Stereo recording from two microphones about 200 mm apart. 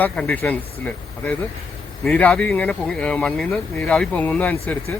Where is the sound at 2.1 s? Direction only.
5° left (ahead or behind).